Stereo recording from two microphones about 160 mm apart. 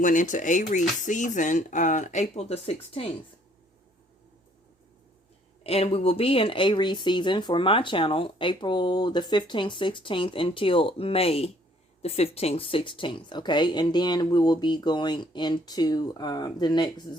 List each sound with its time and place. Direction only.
0.0 s speech: 55° left (ahead or behind)
5.6 s speech: 40° left (ahead or behind)